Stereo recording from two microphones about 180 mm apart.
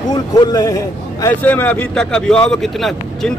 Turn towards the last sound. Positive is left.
turn(degrees=0)  # may be behind; listen again after turning